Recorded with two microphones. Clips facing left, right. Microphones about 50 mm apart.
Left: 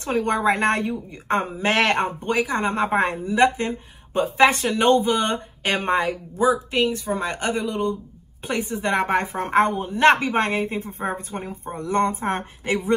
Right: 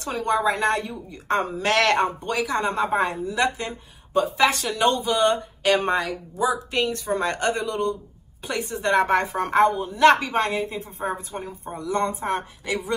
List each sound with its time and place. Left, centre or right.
0.0 s a woman's voice: left
1.3 s speech: left
6.5 s speech: centre; by 9.6 s left
9.6 s a woman's voice: left